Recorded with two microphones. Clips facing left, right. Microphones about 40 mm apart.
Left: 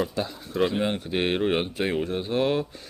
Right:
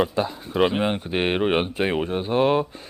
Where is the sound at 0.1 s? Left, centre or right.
Right.